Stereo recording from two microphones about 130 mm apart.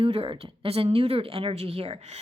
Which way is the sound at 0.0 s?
45° right (ahead or behind).